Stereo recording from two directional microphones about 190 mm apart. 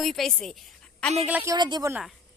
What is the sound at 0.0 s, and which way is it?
Speech, centre (ahead or behind).